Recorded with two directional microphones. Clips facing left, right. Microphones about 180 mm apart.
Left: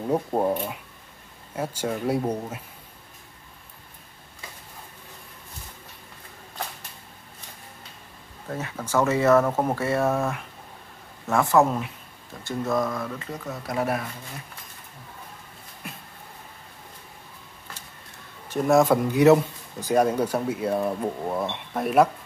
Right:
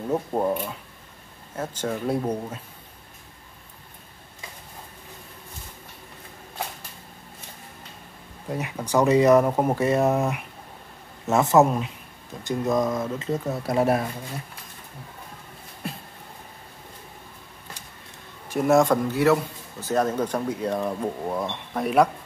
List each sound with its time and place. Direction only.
0.1 s speech: 15° left (ahead or behind)
8.5 s speech: 15° right (ahead or behind)
18.5 s a man's voice: 5° right (ahead or behind)
19.0 s speech: 20° left (ahead or behind); by 22.1 s centre (ahead or behind)